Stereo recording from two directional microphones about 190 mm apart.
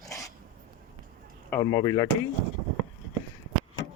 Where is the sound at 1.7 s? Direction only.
20° left (ahead or behind).